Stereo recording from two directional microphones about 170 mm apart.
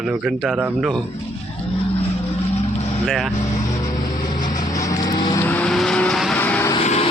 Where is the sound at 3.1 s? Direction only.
Centre (ahead or behind).